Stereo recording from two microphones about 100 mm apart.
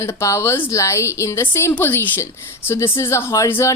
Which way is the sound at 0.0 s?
30° left (ahead or behind).